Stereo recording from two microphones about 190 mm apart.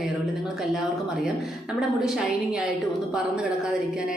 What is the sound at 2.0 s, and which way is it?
Speech, 5° right (ahead or behind).